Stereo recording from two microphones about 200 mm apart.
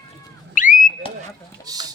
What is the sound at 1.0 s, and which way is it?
Smoke detector, 25° left (ahead or behind).